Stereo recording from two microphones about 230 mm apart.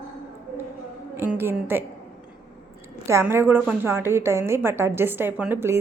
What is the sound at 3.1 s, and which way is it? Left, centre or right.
A woman's voice, centre.